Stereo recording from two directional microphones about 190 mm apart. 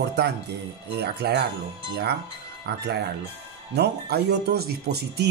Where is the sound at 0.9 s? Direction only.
60° right (ahead or behind).